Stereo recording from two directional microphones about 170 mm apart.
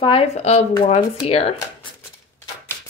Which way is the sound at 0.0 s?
35° left (ahead or behind).